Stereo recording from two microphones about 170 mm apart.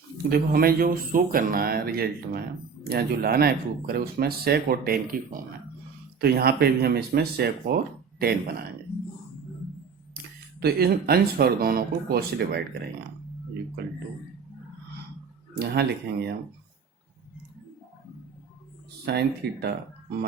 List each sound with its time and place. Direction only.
0.3 s speech: 60° right (ahead or behind)
10.6 s speech: 65° right (ahead or behind)
15.5 s speech: 70° right (ahead or behind)
19.0 s speech: 70° right (ahead or behind)